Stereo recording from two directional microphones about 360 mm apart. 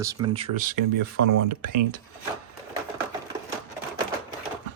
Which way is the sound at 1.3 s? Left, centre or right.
Right.